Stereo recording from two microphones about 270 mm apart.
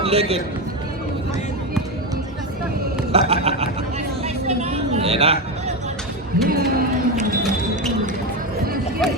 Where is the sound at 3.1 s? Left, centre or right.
Right.